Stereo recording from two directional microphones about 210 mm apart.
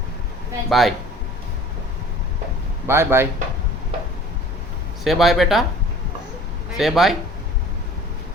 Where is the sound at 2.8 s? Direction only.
10° right (ahead or behind).